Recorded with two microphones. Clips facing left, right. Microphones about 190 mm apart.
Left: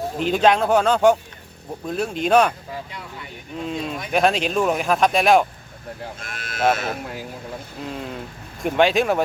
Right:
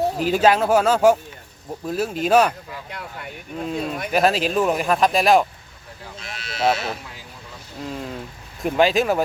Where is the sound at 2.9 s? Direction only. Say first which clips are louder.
Right 2 dB; 55° right (ahead or behind).